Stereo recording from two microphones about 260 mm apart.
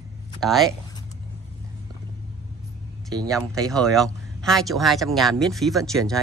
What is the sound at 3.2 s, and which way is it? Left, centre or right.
Speech, centre.